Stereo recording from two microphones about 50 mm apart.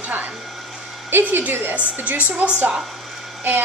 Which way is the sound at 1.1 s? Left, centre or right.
Right.